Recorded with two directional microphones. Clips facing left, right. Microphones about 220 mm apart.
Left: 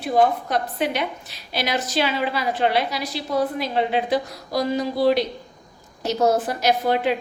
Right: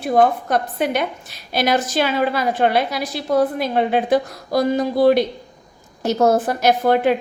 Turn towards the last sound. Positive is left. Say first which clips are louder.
# right 4 dB
turn(degrees=-50)  # may be behind; listen again after turning